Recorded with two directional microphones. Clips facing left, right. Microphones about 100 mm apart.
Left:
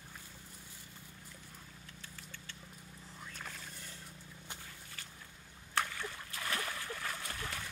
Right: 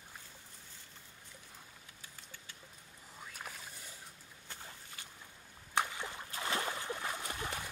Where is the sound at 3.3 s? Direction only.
10° right (ahead or behind).